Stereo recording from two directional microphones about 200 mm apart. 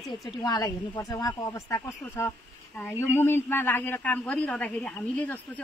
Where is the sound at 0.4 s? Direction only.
20° left (ahead or behind).